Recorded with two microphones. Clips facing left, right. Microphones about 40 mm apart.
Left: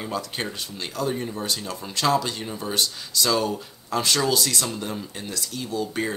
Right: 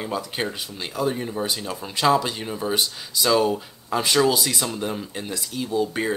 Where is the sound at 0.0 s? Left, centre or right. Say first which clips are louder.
Right 2 dB; centre.